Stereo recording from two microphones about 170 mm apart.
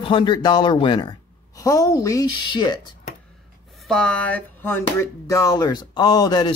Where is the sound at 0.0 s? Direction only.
30° left (ahead or behind).